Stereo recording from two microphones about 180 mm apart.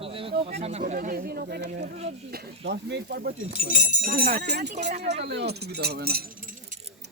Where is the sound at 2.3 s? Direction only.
65° right (ahead or behind).